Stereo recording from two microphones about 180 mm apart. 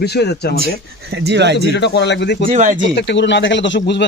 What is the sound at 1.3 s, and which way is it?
Speech, 70° right (ahead or behind).